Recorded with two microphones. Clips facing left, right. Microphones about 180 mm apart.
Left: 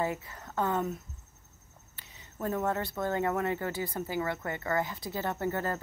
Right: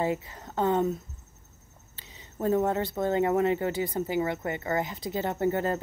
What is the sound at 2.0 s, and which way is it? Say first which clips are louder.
Speech: right 5 dB; 25° right (ahead or behind).